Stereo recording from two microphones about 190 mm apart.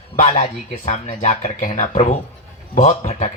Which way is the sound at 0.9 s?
40° left (ahead or behind).